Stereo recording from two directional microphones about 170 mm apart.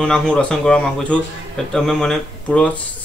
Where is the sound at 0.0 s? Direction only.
5° left (ahead or behind).